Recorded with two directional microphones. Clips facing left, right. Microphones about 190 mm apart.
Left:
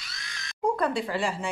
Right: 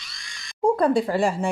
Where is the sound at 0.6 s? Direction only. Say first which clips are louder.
Right 7 dB; 35° right (ahead or behind).